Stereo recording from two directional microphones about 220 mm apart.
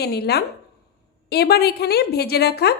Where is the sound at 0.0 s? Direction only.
45° left (ahead or behind).